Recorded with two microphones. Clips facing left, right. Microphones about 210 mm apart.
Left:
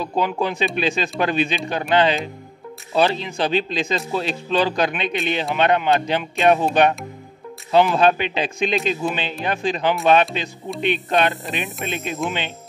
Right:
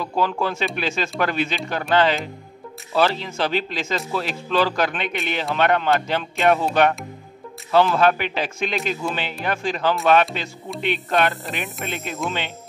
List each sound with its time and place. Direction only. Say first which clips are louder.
0.0 s speech: left 1 dB; 20° left (ahead or behind)